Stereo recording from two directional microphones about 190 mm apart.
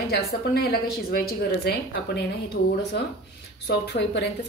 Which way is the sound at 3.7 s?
60° left (ahead or behind).